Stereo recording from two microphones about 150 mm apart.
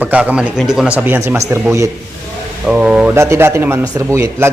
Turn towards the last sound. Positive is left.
turn(degrees=-20)  # may be behind; listen again after turning